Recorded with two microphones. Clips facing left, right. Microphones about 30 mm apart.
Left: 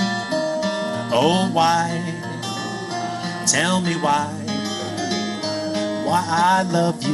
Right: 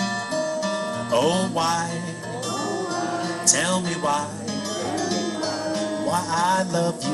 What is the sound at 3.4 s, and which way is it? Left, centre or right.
Speech, left.